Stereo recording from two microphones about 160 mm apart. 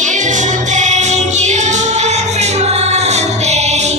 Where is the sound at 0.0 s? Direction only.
50° right (ahead or behind).